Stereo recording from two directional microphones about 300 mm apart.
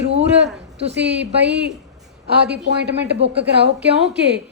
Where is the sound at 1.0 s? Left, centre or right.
Right.